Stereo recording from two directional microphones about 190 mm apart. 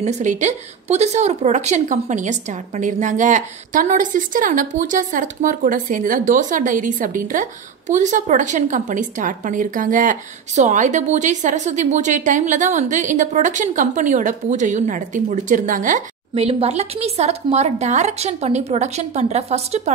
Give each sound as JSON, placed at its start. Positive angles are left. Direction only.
{"t": 0.0, "sound": "a woman's voice", "side_deg": -40}